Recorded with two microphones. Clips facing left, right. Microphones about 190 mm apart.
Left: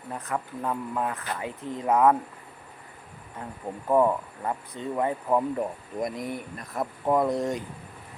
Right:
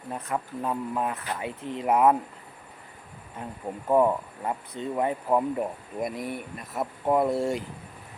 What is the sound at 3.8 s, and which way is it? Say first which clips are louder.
Speech: even; 10° right (ahead or behind).